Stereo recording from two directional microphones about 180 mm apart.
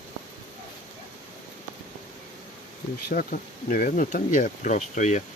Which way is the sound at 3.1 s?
50° left (ahead or behind).